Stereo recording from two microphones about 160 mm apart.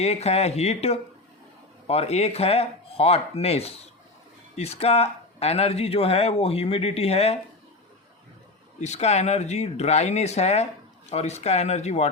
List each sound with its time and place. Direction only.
0.0 s speech: 40° left (ahead or behind)
8.8 s speech: 45° left (ahead or behind)